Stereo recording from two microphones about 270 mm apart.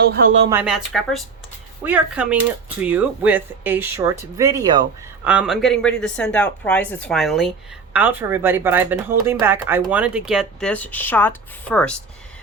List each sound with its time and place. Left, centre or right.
0.0 s speech: right
0.5 s speech: centre